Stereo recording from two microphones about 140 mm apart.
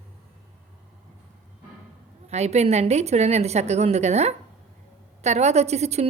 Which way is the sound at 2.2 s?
50° right (ahead or behind).